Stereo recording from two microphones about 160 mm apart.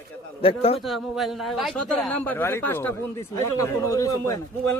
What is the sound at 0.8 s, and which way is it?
A man's voice, centre (ahead or behind).